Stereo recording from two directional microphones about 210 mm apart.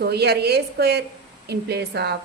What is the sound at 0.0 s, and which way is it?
A woman's voice, 50° right (ahead or behind).